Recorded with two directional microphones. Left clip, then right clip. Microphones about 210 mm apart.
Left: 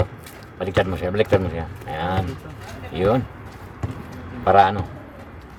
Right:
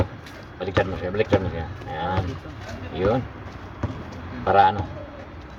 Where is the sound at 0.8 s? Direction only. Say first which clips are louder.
Left 3 dB; 35° left (ahead or behind).